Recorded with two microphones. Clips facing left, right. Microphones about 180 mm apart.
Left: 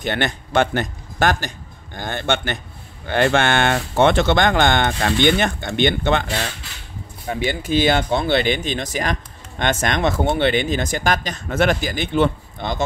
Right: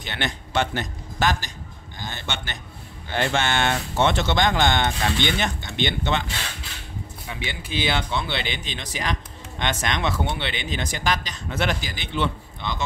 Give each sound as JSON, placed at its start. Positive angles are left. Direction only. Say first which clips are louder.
{"t": 0.0, "sound": "speech", "louder": "left 7 dB", "side_deg": 50}